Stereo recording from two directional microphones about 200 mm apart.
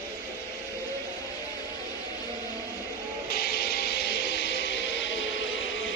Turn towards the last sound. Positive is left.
turn(degrees=65)  # may be behind; listen again after turning